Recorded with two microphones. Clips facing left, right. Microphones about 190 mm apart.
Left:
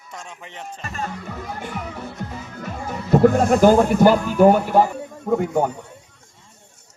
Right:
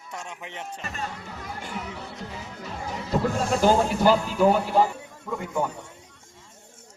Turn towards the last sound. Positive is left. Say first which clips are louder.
# left 8 dB
turn(degrees=60)  # may be behind; listen again after turning